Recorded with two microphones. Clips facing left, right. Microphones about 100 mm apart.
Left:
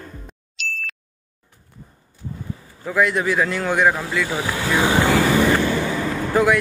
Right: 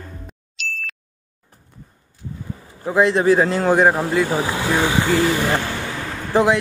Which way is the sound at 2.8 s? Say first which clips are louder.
Right 4 dB; 25° right (ahead or behind).